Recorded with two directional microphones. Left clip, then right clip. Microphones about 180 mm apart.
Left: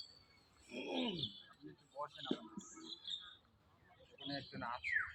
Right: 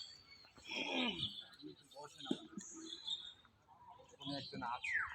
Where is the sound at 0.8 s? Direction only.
45° left (ahead or behind).